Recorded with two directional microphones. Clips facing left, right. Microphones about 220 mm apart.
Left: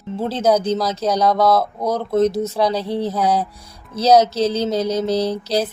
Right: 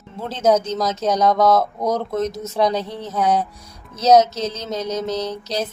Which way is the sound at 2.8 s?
35° left (ahead or behind).